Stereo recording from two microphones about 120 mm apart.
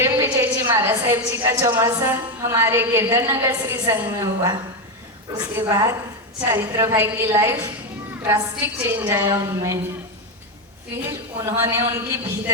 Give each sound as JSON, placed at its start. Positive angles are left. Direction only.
{"t": 0.0, "sound": "a sound", "side_deg": -20}
{"t": 1.5, "sound": "a woman's voice", "side_deg": -20}
{"t": 5.4, "sound": "a woman's voice", "side_deg": -20}
{"t": 11.1, "sound": "a woman's voice", "side_deg": -20}